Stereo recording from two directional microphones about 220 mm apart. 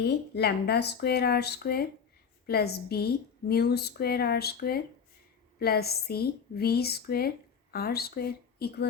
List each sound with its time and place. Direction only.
0.0 s a woman's voice: 50° left (ahead or behind)